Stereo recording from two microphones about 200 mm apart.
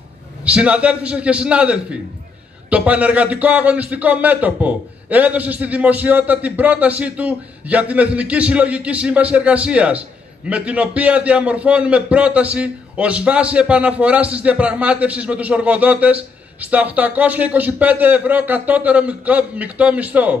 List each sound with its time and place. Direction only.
0.5 s a man's voice: 5° right (ahead or behind)